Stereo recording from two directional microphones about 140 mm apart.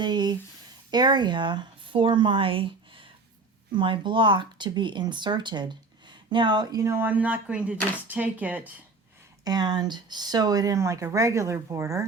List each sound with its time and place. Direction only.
0.0 s speech: 30° right (ahead or behind)
3.7 s speech: 35° right (ahead or behind); by 8.7 s 10° right (ahead or behind)
9.4 s speech: 30° right (ahead or behind)